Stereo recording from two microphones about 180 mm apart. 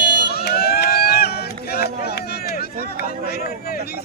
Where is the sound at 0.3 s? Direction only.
60° left (ahead or behind).